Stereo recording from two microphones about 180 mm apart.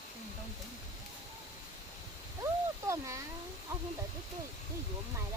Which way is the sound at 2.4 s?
15° right (ahead or behind).